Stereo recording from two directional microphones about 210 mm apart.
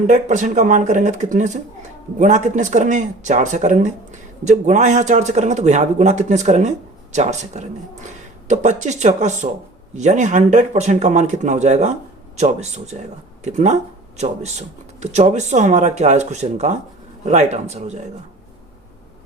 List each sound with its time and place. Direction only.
0.1 s speech: 35° right (ahead or behind)
15.0 s speech: 30° right (ahead or behind)